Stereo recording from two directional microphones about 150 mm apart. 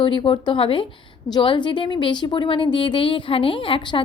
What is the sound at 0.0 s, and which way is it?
A woman's voice, 35° left (ahead or behind).